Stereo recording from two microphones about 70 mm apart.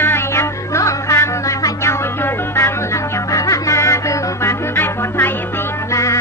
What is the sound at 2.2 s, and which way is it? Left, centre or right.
Music, left.